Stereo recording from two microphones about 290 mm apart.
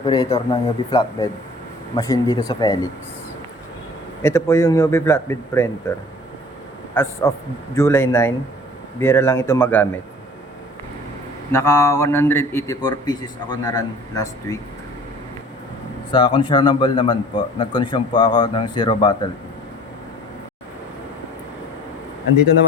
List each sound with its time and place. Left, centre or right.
0.0 s a man's voice: centre
4.2 s a man's voice: centre
6.9 s a man's voice: centre
11.5 s a man's voice: centre
16.1 s a man's voice: centre